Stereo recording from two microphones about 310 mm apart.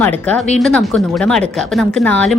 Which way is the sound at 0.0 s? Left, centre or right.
Centre.